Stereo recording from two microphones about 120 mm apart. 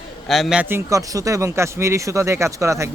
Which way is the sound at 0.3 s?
Centre (ahead or behind).